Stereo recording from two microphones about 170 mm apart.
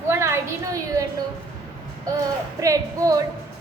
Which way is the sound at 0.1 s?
15° right (ahead or behind).